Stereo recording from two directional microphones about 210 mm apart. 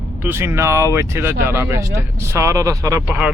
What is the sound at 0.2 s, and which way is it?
Speech, 10° right (ahead or behind).